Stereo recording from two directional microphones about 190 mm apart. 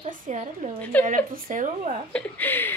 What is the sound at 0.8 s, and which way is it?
Speech, 10° left (ahead or behind).